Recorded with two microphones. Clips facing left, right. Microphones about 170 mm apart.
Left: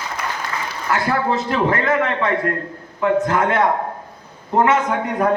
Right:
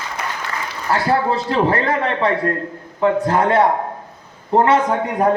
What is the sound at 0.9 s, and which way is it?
A man's voice, 30° right (ahead or behind).